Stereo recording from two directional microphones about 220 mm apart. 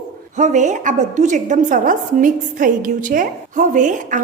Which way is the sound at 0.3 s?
35° right (ahead or behind).